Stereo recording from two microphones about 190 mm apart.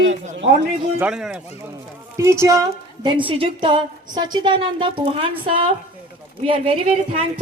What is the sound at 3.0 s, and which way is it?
A woman's voice, 25° right (ahead or behind).